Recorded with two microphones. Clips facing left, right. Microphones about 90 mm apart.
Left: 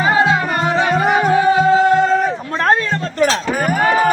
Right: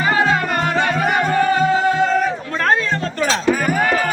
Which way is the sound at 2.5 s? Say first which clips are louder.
Left 4 dB; 25° left (ahead or behind).